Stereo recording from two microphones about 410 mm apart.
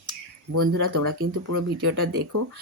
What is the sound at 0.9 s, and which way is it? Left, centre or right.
Speech, right.